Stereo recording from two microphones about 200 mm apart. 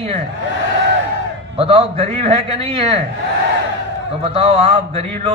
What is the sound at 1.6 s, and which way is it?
A man's voice, 30° right (ahead or behind).